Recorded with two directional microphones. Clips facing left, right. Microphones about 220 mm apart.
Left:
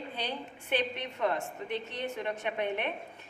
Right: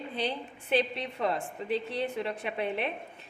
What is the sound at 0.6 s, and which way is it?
A woman's voice, 35° right (ahead or behind).